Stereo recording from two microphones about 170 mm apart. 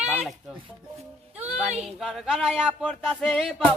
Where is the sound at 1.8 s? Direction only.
Centre (ahead or behind).